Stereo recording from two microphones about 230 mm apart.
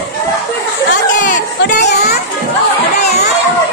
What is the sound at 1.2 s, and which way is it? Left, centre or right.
Chatter, left.